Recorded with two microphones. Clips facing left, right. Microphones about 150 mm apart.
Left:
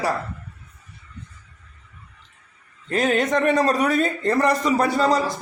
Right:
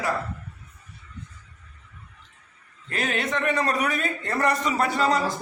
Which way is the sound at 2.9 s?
40° left (ahead or behind).